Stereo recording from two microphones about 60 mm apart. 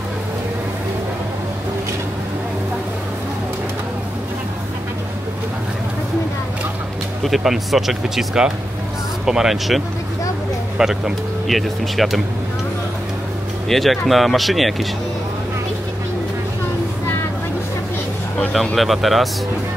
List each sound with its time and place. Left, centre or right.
7.2 s speech: centre
11.4 s speech: centre
13.7 s speech: centre
18.8 s speech: centre